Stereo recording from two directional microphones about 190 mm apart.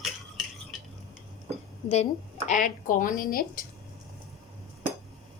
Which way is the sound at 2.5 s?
45° left (ahead or behind).